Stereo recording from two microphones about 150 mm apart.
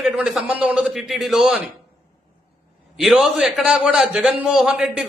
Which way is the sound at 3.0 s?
Centre (ahead or behind).